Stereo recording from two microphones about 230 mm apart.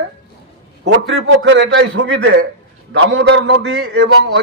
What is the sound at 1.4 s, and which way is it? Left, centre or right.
A man's voice, right.